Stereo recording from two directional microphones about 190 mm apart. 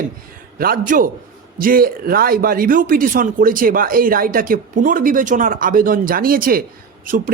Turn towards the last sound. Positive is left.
turn(degrees=-50)  # may be behind; listen again after turning